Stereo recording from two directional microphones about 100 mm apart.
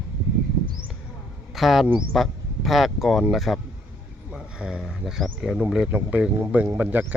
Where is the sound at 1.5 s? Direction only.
Centre (ahead or behind).